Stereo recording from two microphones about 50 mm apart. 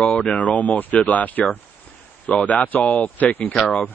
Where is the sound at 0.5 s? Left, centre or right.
Left.